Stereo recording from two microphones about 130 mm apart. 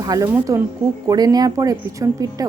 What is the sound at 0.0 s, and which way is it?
A woman's voice, 25° right (ahead or behind).